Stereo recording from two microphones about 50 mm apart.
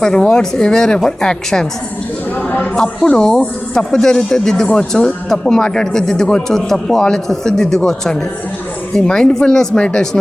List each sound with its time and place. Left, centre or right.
0.0 s speech: centre